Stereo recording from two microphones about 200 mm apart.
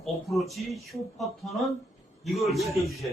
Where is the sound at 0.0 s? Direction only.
Centre (ahead or behind).